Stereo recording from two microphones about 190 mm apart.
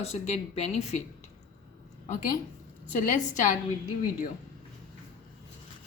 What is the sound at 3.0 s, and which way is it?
Speech, 40° left (ahead or behind).